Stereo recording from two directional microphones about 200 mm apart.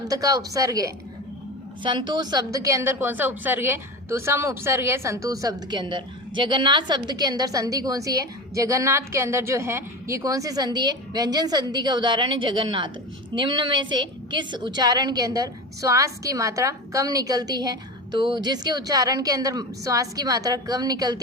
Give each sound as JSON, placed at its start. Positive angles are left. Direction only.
{"t": 0.0, "sound": "a woman's voice", "side_deg": -20}